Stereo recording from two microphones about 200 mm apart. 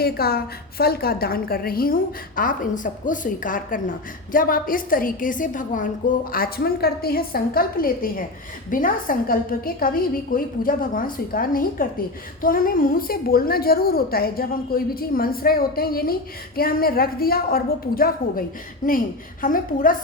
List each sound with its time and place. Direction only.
0.0 s a woman's voice: 50° left (ahead or behind)